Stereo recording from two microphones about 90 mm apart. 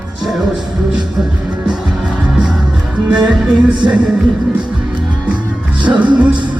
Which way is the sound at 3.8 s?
45° right (ahead or behind).